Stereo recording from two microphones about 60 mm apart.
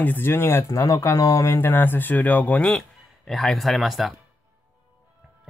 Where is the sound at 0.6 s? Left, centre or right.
Left.